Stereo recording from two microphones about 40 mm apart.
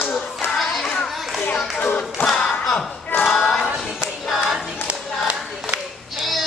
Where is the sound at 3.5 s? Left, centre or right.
Centre.